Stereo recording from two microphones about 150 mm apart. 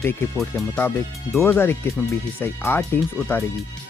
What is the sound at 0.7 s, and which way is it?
Speech, 15° left (ahead or behind).